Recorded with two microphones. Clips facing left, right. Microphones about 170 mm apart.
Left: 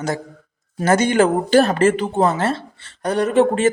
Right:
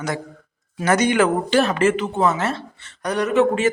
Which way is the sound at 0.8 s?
30° left (ahead or behind).